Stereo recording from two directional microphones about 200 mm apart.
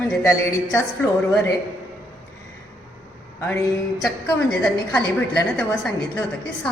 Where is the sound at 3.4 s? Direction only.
10° left (ahead or behind).